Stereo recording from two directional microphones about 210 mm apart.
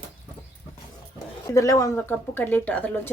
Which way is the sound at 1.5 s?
15° left (ahead or behind).